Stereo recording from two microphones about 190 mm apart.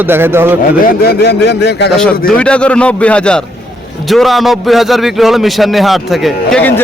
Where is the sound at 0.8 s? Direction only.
55° left (ahead or behind).